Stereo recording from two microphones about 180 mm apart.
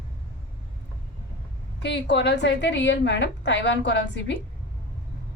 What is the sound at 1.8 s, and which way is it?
Speech, 75° left (ahead or behind).